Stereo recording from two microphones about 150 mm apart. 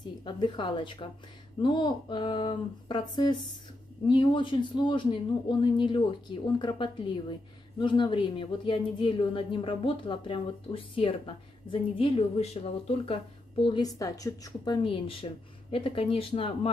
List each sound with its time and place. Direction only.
0.2 s a woman's voice: 30° left (ahead or behind)
13.7 s a woman's voice: 25° left (ahead or behind)